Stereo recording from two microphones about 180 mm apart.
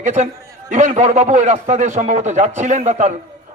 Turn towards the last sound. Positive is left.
turn(degrees=-40)  # may be behind; listen again after turning